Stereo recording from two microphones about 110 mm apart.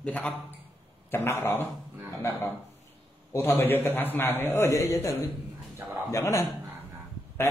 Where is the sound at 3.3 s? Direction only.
20° left (ahead or behind).